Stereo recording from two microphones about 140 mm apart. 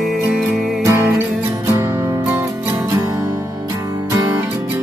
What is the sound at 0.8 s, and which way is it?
Music, 20° right (ahead or behind).